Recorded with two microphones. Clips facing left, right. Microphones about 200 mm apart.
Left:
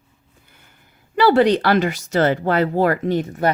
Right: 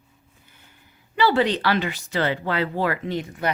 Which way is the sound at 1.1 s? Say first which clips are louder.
Left 6 dB; 45° left (ahead or behind).